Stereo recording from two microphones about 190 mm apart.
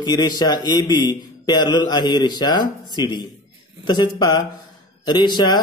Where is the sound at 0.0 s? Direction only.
20° left (ahead or behind).